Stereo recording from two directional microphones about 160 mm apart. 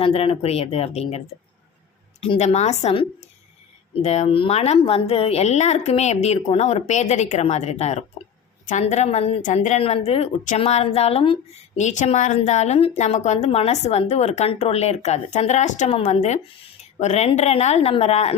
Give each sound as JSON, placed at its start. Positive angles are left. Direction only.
{"t": 0.0, "sound": "speech", "side_deg": 35}
{"t": 2.2, "sound": "a woman's voice", "side_deg": 40}